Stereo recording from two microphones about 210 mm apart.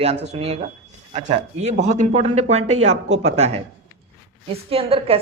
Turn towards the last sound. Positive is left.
turn(degrees=-25)  # may be behind; listen again after turning